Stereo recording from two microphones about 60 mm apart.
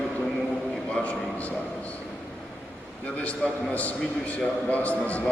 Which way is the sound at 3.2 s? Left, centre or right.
Left.